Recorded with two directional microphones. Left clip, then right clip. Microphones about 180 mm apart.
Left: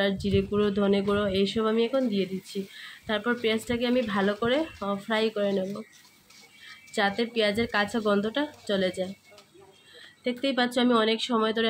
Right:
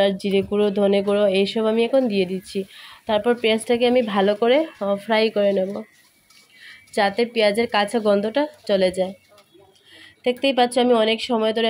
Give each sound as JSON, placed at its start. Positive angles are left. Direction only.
{"t": 0.0, "sound": "speech", "side_deg": -30}
{"t": 6.9, "sound": "speech", "side_deg": -35}
{"t": 10.2, "sound": "speech", "side_deg": -30}